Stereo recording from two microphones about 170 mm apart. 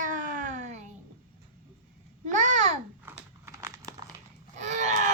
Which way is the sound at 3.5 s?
20° right (ahead or behind).